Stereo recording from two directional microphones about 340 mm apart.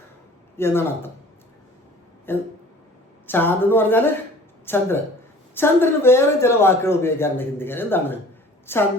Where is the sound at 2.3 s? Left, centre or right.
Centre.